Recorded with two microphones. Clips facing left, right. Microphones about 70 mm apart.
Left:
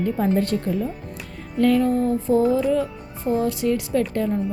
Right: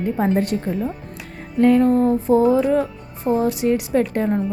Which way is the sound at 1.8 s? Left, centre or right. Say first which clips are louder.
Right 4 dB; right.